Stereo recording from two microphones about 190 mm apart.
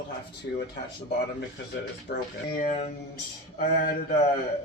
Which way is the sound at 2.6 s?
35° left (ahead or behind).